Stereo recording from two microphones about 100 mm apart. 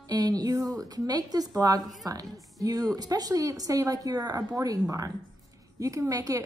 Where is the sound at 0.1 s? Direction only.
40° right (ahead or behind).